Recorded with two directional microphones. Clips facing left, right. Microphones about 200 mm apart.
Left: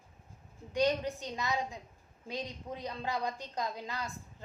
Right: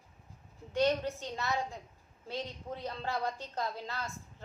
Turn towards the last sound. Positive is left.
turn(degrees=15)  # may be behind; listen again after turning